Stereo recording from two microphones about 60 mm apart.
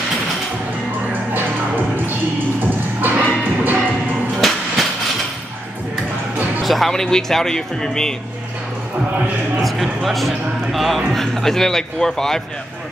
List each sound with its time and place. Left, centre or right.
3.0 s music: right
4.4 s train: centre
6.6 s speech: centre
9.6 s speech: centre